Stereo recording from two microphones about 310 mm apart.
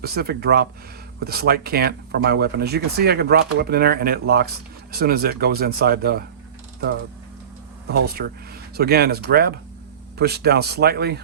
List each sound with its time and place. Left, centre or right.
0.0 s speech: right
8.0 s speech: right